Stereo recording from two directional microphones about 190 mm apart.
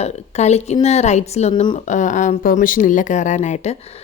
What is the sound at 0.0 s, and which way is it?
Speech, 35° left (ahead or behind).